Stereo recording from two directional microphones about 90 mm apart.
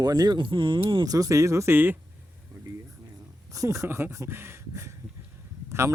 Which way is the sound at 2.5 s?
40° right (ahead or behind).